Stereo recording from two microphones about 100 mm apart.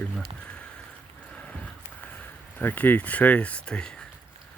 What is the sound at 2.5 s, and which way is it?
Speech, 15° left (ahead or behind).